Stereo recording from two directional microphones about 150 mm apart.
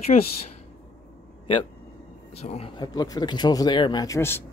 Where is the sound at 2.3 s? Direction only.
45° left (ahead or behind).